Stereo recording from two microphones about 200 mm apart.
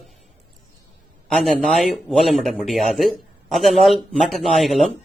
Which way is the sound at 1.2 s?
Centre (ahead or behind).